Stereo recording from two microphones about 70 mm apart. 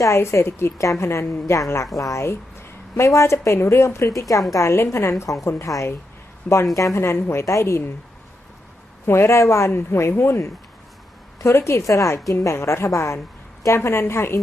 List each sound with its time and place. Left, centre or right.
0.0 s a woman's voice: left
4.5 s a woman's voice: left
9.0 s a woman's voice: left